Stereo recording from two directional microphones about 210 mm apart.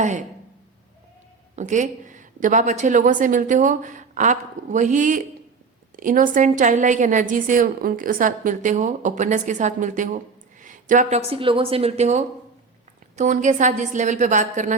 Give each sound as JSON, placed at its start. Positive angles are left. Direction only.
{"t": 0.0, "sound": "a woman's voice", "side_deg": -35}
{"t": 1.5, "sound": "a woman's voice", "side_deg": -35}